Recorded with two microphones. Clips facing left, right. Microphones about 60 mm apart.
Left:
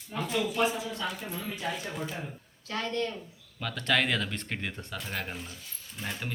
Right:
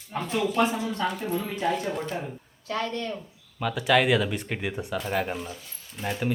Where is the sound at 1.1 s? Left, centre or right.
Right.